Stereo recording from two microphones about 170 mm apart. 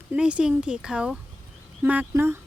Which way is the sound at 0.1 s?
5° right (ahead or behind).